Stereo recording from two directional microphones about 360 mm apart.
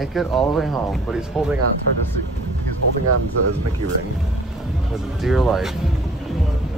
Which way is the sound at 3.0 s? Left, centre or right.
Right.